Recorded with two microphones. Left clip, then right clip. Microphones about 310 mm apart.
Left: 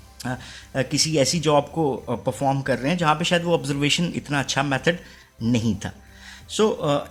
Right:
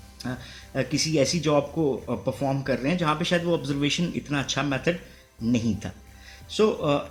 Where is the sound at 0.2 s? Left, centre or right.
Left.